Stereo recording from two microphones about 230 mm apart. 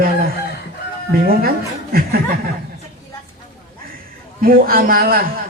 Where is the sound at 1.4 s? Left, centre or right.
Right.